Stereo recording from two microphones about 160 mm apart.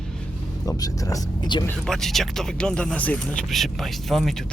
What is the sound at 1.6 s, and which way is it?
Speech, 5° left (ahead or behind).